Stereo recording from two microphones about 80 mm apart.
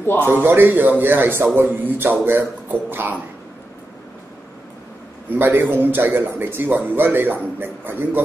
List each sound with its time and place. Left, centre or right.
0.0 s a man's voice: left
0.3 s a man's voice: right
5.3 s a man's voice: right